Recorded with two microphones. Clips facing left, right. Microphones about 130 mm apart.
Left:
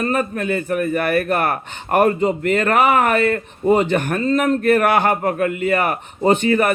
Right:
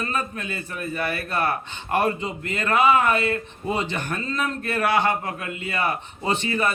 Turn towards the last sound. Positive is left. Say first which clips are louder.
# left 8 dB
turn(degrees=55)  # may be behind; listen again after turning